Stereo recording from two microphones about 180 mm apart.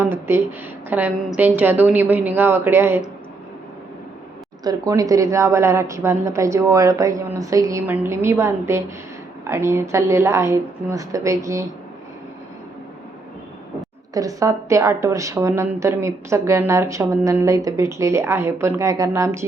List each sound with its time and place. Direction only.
0.0 s a woman's voice: 15° right (ahead or behind)
4.6 s a woman's voice: 20° right (ahead or behind)
14.1 s a woman's voice: 20° right (ahead or behind)